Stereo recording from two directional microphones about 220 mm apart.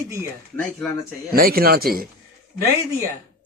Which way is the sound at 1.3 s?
40° right (ahead or behind).